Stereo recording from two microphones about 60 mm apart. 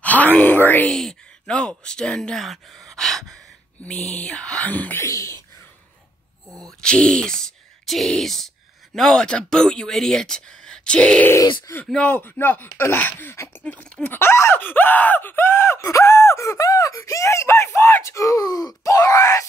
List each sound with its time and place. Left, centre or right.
0.0 s speech: left
0.8 s a sound: centre
1.6 s speech: centre
5.0 s speech: left
6.6 s speech: centre
12.1 s speech: left
13.6 s speech: left
14.0 s speech: left
15.8 s gasp: left
16.6 s speech: left